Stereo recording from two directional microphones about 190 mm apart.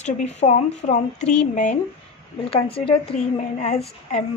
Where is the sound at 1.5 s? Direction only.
40° left (ahead or behind).